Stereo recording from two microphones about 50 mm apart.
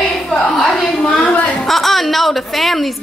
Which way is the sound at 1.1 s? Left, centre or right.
Left.